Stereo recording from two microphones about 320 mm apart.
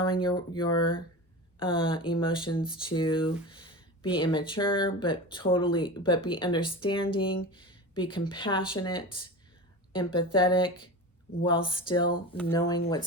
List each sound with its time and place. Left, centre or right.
0.0 s speech: centre